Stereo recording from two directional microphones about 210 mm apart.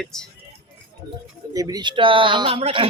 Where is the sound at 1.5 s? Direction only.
15° right (ahead or behind).